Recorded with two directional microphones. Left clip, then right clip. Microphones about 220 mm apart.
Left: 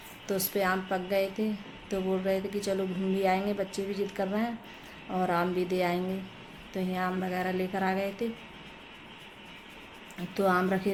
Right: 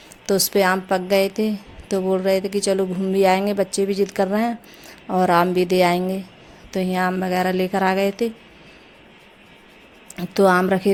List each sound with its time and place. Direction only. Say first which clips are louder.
0.3 s a woman's voice: right 11 dB; 45° right (ahead or behind)
10.2 s a woman's voice: right 11 dB; 45° right (ahead or behind)